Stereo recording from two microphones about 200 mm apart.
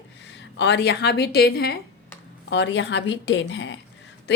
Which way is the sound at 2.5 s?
65° left (ahead or behind).